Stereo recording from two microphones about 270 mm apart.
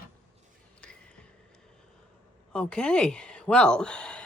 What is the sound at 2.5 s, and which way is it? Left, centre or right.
Speech, centre.